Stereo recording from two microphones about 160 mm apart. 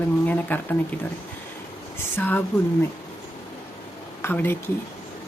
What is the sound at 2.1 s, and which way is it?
Speech, 10° left (ahead or behind).